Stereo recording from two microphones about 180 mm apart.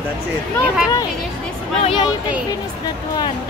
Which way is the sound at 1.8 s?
30° left (ahead or behind).